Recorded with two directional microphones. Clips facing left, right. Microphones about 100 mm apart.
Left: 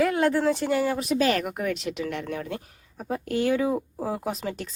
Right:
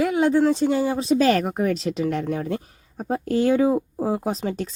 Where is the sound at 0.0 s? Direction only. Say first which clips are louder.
Right 3 dB; 20° right (ahead or behind).